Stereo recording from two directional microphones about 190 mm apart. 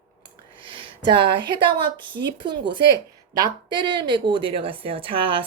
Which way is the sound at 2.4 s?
25° right (ahead or behind).